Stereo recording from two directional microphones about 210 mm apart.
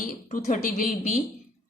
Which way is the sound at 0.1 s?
40° left (ahead or behind).